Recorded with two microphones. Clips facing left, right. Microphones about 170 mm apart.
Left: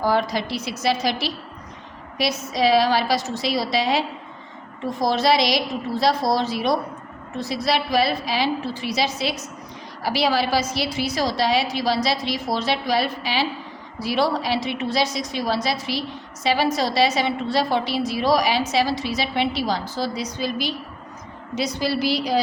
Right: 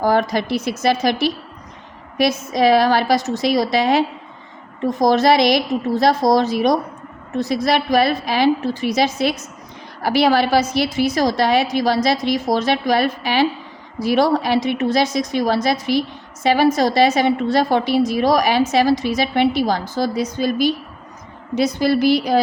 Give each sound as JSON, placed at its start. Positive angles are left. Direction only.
{"t": 0.0, "sound": "a woman's voice", "side_deg": -50}